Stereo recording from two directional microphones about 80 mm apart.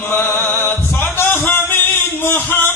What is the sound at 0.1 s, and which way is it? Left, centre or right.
Music, left.